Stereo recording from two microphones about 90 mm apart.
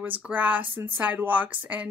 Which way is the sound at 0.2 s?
20° right (ahead or behind).